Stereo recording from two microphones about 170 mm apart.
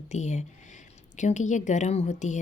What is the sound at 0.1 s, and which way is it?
Speech, 45° left (ahead or behind).